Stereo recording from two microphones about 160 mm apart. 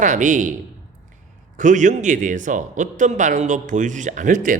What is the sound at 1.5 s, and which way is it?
Speech, 50° right (ahead or behind).